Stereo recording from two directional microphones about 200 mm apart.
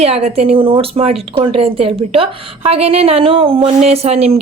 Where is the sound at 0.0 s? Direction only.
30° right (ahead or behind).